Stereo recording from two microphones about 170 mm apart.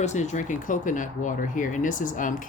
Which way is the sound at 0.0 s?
45° left (ahead or behind).